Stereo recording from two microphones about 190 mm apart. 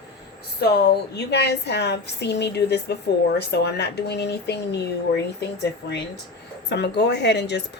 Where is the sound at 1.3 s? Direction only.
60° left (ahead or behind).